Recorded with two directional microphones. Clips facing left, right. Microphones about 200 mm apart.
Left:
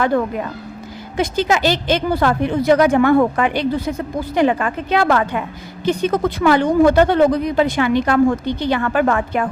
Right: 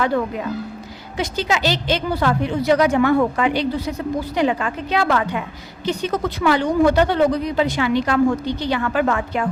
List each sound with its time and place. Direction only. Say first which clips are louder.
1.1 s speech: left 4 dB; 50° left (ahead or behind)